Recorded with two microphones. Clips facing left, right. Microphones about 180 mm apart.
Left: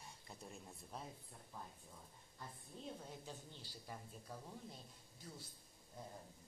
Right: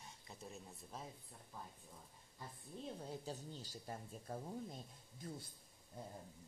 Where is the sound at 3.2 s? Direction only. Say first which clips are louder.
Right 6 dB; 40° right (ahead or behind).